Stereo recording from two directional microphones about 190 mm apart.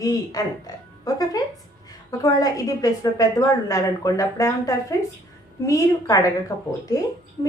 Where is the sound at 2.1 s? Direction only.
20° left (ahead or behind).